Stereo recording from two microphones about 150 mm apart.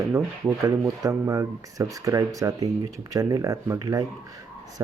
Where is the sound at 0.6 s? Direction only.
20° right (ahead or behind).